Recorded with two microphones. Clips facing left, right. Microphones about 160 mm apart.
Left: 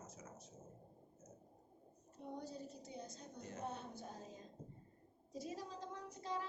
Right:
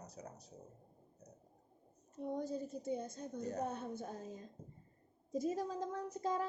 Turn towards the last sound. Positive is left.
turn(degrees=-45)  # may be behind; listen again after turning